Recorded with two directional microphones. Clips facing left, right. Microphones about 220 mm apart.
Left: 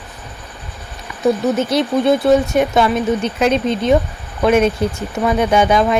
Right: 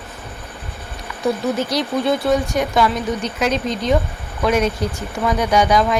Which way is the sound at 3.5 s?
55° left (ahead or behind).